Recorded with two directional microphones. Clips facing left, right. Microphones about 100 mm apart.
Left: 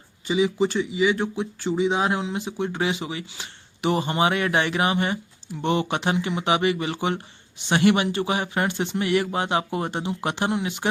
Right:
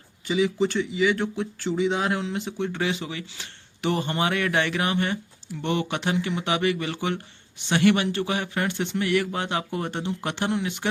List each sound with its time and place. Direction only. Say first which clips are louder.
0.3 s speech: left 1 dB; 20° left (ahead or behind)